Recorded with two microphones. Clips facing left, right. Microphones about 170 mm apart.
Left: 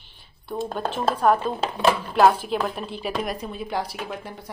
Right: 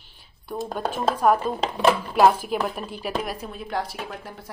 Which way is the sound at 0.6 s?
10° right (ahead or behind).